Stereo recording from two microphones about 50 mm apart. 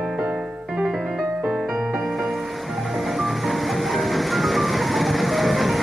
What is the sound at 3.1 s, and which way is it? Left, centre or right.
Music, centre.